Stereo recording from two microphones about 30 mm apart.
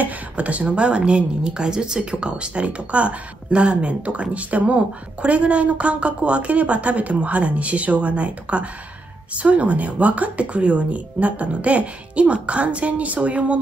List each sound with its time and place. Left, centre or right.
0.0 s a woman's voice: right